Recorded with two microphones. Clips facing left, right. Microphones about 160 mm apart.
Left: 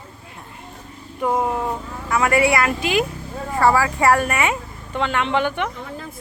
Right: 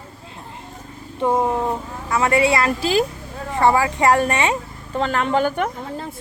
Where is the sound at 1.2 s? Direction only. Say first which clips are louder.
Right 2 dB; 25° right (ahead or behind).